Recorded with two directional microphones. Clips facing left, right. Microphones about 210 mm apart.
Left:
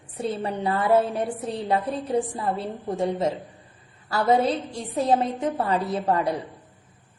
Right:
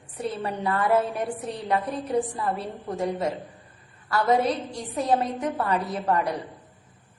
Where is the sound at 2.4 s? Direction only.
25° left (ahead or behind).